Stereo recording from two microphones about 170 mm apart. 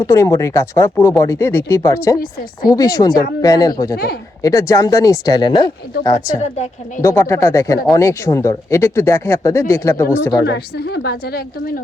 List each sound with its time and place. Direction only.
0.0 s speech: 20° left (ahead or behind)
3.9 s speech: 65° left (ahead or behind)
4.4 s speech: 20° left (ahead or behind)
6.4 s a woman's voice: 45° left (ahead or behind)
7.0 s speech: 15° left (ahead or behind)
10.4 s a woman's voice: 80° left; by 11.7 s 65° left (ahead or behind)